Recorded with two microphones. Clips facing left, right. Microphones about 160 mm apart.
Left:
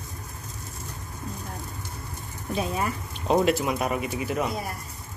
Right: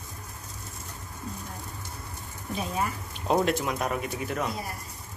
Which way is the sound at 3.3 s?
5° left (ahead or behind).